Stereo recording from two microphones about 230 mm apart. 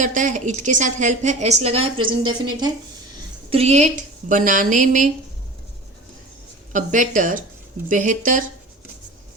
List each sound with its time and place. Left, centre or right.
0.0 s a woman's voice: right
6.7 s a woman's voice: right